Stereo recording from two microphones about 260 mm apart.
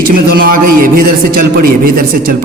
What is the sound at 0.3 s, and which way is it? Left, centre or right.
A man's voice, right.